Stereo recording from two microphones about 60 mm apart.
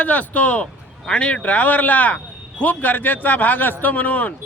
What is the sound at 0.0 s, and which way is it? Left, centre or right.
A man's voice, left.